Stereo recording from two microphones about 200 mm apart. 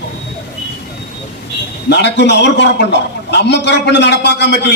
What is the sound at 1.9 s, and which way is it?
A man's voice, 60° left (ahead or behind).